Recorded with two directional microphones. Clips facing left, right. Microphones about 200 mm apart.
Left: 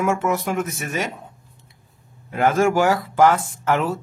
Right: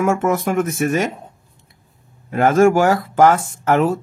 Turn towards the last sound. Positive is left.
turn(degrees=-45)  # may be behind; listen again after turning